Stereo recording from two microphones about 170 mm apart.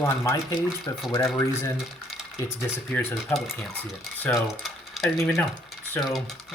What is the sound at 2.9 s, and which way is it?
Speech, 15° left (ahead or behind).